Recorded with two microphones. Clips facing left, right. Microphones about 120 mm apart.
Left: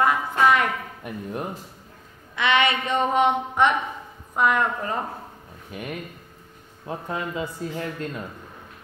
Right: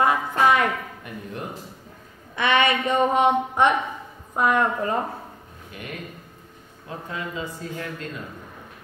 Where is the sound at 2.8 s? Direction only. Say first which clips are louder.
Right 2 dB; 15° right (ahead or behind).